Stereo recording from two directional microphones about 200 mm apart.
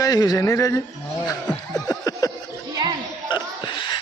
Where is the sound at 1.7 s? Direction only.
20° left (ahead or behind).